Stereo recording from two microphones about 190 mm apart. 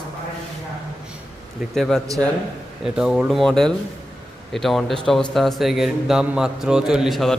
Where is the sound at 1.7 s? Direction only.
Centre (ahead or behind).